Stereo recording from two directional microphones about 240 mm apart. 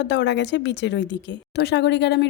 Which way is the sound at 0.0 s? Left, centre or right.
Left.